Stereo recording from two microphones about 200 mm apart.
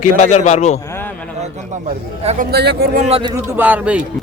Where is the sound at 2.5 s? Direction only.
55° right (ahead or behind).